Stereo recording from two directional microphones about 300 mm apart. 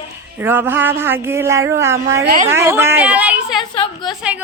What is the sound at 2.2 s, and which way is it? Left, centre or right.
Speech, right.